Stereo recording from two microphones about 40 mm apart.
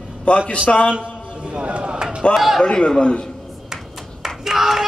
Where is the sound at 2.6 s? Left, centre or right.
Centre.